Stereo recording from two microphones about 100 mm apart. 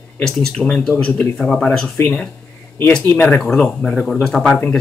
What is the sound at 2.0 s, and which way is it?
Speech, 15° left (ahead or behind).